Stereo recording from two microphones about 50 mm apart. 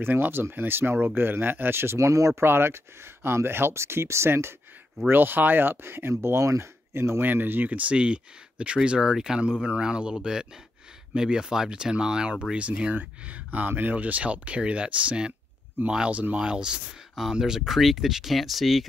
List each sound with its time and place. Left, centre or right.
0.0 s speech: right
2.0 s speech: right
2.4 s speech: right
7.2 s speech: right
7.7 s speech: right
12.9 s speech: right
17.1 s speech: centre